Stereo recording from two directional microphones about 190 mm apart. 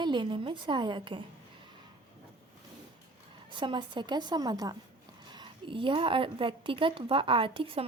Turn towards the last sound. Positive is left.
turn(degrees=-30)  # may be behind; listen again after turning